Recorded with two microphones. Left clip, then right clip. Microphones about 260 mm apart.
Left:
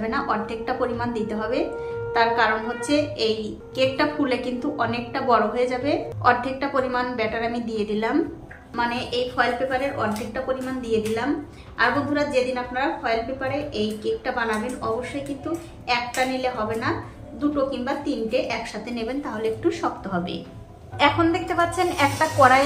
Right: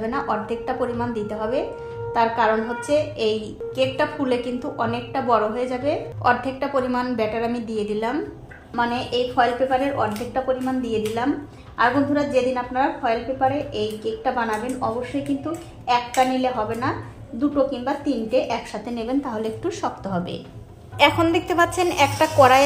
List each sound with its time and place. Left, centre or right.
0.1 s a woman's voice: right
8.7 s a woman's voice: right